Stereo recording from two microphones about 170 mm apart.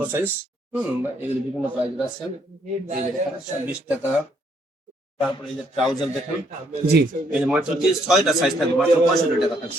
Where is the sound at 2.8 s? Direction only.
45° right (ahead or behind).